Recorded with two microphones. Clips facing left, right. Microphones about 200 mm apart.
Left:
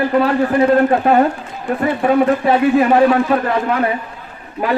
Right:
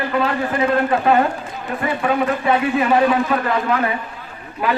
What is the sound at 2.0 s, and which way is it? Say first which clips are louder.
Speech: left 6 dB; 40° left (ahead or behind).